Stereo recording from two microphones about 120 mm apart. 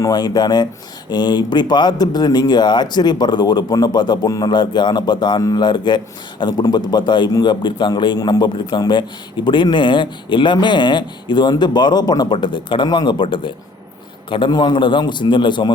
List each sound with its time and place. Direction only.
0.0 s a man's voice: 35° left (ahead or behind)